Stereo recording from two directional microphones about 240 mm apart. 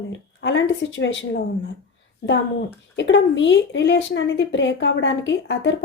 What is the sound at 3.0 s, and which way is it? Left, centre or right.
A woman's voice, left.